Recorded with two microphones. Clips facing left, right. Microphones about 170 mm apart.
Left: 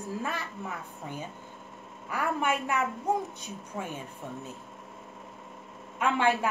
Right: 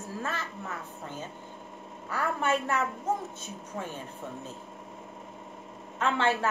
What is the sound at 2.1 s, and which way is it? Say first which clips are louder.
Speech: even; 15° left (ahead or behind).